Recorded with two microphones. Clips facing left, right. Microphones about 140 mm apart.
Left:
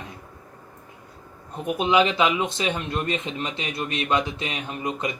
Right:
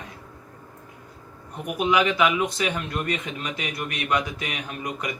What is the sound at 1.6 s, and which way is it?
A man's voice, 25° left (ahead or behind).